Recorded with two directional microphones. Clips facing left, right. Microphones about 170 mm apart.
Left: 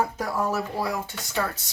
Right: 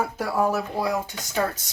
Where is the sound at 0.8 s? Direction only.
15° right (ahead or behind).